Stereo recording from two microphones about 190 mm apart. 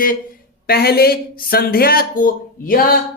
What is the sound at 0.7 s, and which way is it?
Speech, 55° left (ahead or behind).